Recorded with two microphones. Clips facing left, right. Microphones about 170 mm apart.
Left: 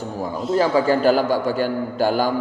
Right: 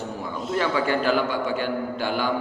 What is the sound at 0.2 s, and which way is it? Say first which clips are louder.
A man's voice: left 7 dB; 40° left (ahead or behind).